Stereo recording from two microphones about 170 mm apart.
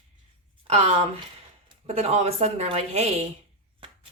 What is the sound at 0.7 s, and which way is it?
Speech, 35° right (ahead or behind).